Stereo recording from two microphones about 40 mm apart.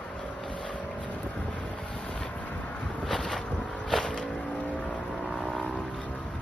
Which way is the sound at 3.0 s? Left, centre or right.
Centre.